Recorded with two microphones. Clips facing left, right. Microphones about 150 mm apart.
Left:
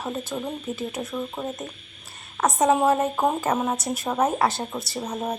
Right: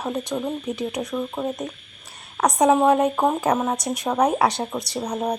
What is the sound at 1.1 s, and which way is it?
Speech, 10° right (ahead or behind).